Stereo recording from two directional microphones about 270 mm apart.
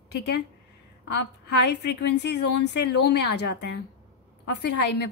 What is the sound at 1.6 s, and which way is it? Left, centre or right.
A woman's voice, left.